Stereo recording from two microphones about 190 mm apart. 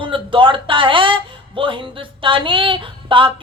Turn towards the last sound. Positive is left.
turn(degrees=-25)  # may be behind; listen again after turning